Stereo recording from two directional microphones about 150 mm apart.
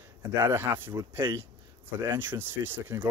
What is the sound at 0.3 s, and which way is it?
Speech, 15° right (ahead or behind).